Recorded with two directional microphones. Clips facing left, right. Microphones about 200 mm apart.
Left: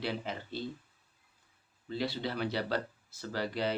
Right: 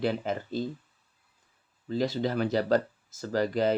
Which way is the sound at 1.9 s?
45° right (ahead or behind).